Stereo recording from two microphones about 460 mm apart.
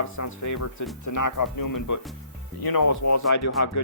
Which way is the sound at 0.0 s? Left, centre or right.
Left.